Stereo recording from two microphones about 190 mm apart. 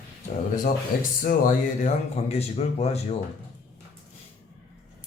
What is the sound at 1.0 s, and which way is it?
Speech, 45° left (ahead or behind).